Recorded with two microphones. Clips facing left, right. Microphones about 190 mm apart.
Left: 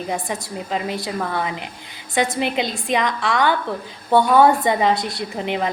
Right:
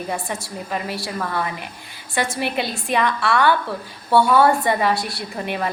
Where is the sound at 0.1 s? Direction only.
20° left (ahead or behind).